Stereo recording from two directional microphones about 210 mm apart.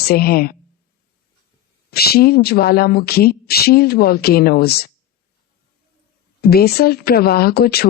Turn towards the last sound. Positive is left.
turn(degrees=50)  # may be behind; listen again after turning